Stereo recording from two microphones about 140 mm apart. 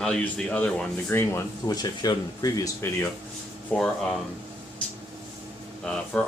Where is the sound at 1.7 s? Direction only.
30° left (ahead or behind).